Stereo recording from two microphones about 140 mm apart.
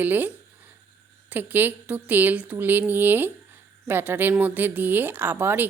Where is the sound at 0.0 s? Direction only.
15° right (ahead or behind).